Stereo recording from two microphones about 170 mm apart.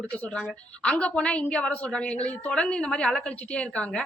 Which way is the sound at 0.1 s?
5° left (ahead or behind).